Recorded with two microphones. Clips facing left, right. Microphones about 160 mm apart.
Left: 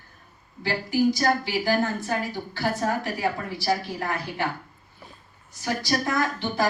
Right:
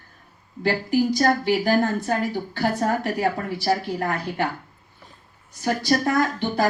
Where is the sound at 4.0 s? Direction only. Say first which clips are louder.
Right 4 dB; 55° right (ahead or behind).